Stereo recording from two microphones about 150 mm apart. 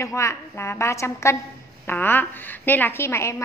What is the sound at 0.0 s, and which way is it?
A woman's voice, 20° left (ahead or behind).